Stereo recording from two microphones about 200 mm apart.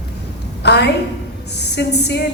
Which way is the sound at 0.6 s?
55° left (ahead or behind).